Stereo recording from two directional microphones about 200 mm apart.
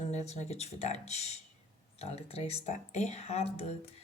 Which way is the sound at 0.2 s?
35° left (ahead or behind).